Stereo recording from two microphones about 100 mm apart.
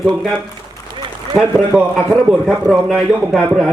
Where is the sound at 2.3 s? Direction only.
5° right (ahead or behind).